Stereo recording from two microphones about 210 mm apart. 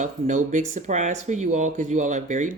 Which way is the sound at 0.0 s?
35° right (ahead or behind).